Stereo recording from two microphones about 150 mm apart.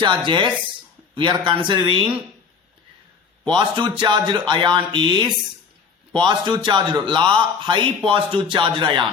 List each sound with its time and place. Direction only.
0.0 s a man's voice: 30° right (ahead or behind)
3.4 s a man's voice: 30° right (ahead or behind)